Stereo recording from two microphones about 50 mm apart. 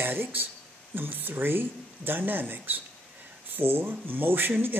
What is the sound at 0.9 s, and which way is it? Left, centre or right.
Speech, right.